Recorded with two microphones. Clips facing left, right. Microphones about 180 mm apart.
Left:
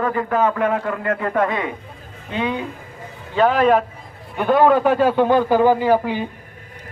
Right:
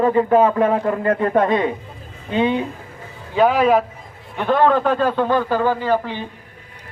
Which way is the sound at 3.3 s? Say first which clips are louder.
Even; 10° right (ahead or behind).